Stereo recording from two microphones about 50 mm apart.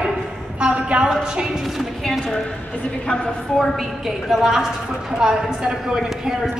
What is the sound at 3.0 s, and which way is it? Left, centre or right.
Speech, left.